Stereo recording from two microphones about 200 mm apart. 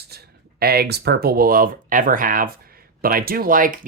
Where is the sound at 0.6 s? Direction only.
50° right (ahead or behind).